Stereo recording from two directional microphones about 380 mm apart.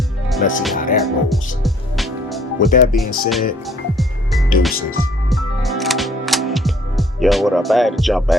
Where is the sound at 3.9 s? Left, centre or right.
Centre.